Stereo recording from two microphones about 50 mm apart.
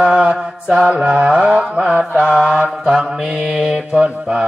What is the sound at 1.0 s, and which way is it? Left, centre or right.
Mantra, right.